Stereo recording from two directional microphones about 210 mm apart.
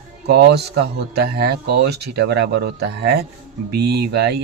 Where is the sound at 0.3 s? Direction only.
50° right (ahead or behind).